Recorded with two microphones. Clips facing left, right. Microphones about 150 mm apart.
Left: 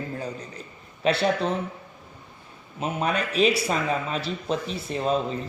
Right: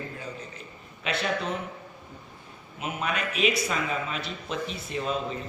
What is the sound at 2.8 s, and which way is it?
A man's voice, 35° left (ahead or behind).